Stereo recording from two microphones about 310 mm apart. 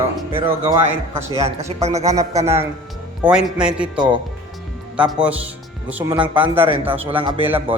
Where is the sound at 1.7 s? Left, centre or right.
Right.